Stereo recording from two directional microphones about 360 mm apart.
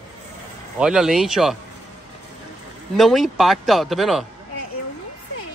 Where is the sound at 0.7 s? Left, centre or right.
Centre.